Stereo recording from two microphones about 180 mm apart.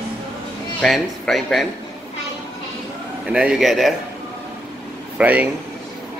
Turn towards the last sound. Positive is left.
turn(degrees=-10)  # may be behind; listen again after turning